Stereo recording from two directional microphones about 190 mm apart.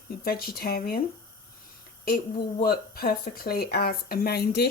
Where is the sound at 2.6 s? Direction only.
55° left (ahead or behind).